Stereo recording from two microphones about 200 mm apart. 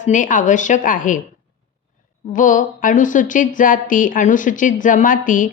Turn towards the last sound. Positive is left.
turn(degrees=40)  # may be behind; listen again after turning